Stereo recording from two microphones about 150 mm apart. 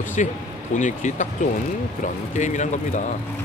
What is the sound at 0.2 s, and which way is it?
Speech, 55° left (ahead or behind).